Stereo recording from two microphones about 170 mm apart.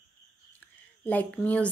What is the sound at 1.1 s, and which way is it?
Speech, 10° left (ahead or behind).